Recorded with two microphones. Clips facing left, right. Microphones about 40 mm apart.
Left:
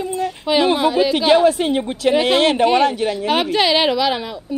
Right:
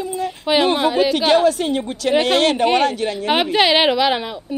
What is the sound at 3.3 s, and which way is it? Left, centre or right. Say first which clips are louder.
A woman's voice: right 2 dB; centre.